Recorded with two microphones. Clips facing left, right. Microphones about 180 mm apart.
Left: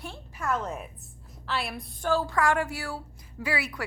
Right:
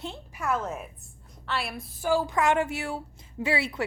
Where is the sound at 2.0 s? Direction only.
15° right (ahead or behind).